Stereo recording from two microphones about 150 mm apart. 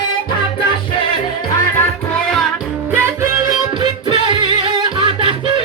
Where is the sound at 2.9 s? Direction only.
15° right (ahead or behind).